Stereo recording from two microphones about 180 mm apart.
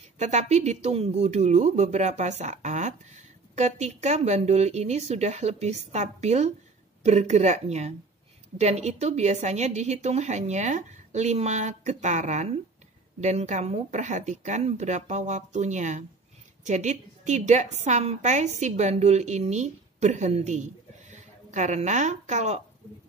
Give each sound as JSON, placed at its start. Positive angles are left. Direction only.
{"t": 0.2, "sound": "a woman's voice", "side_deg": -40}